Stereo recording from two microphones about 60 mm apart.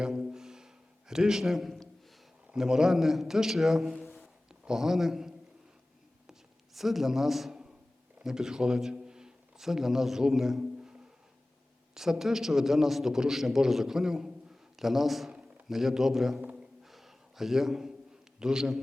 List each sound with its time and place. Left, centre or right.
0.0 s a sound: centre
2.5 s a man's voice: centre
6.7 s a man's voice: centre
10.8 s music: centre
11.9 s a man's voice: centre
16.8 s a sound: centre
18.3 s a man's voice: centre